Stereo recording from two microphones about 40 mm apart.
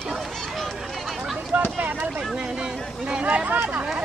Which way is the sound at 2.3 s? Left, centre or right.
Right.